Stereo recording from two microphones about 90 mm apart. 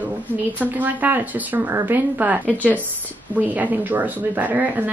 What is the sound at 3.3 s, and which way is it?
Speech, 20° right (ahead or behind).